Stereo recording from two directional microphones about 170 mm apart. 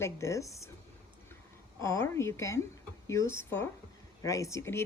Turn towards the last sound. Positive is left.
turn(degrees=15)  # may be behind; listen again after turning